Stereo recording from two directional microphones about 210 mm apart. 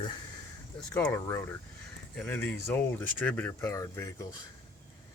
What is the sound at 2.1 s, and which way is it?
Speech, 5° left (ahead or behind).